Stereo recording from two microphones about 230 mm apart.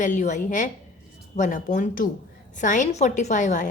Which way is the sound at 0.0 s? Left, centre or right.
Left.